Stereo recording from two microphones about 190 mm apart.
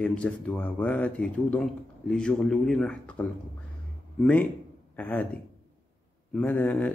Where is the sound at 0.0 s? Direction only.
5° left (ahead or behind).